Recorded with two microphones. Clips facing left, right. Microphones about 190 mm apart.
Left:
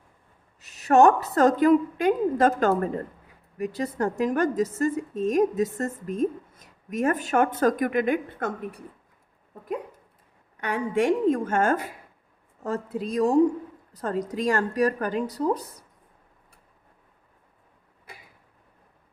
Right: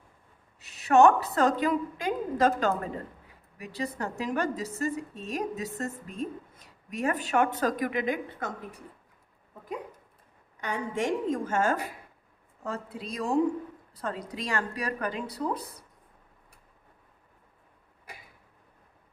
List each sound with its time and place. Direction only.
0.6 s a woman's voice: 45° left (ahead or behind)
10.6 s a woman's voice: 65° left (ahead or behind); by 15.8 s 40° left (ahead or behind)